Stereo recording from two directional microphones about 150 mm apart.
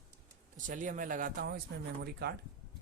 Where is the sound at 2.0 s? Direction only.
90° right.